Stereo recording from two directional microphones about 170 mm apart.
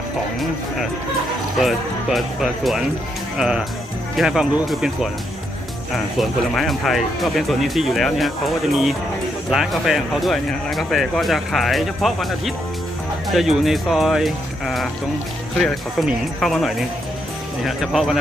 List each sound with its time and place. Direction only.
1.5 s speech: centre (ahead or behind)